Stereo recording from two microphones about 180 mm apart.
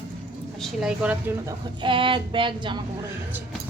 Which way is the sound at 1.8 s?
30° right (ahead or behind).